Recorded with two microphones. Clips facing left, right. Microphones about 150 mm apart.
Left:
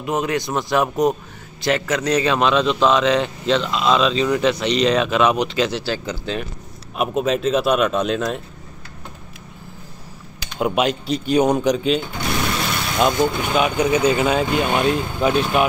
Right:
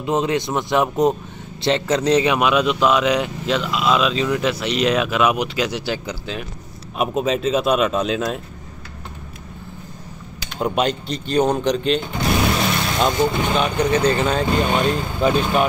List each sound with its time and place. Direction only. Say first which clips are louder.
0.0 s speech: right 2 dB; 25° right (ahead or behind)
2.3 s speech: even; 10° right (ahead or behind)
7.0 s speech: even; centre (ahead or behind)
10.6 s speech: left 1 dB; 5° left (ahead or behind)